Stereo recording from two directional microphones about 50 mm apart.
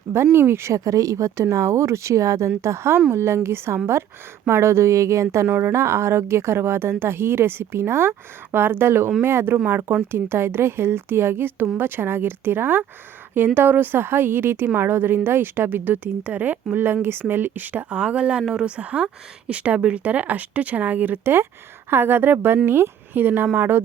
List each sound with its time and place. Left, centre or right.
0.3 s speech: right
2.6 s speech: right
5.5 s speech: right
8.5 s speech: right
16.7 s speech: right
17.9 s speech: right
18.8 s speech: right